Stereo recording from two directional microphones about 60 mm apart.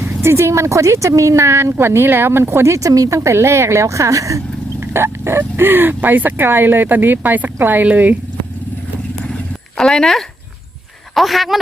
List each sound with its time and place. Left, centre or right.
0.0 s speech: right
3.3 s speech: right
4.8 s wild animals: right
5.5 s speech: right
9.7 s speech: centre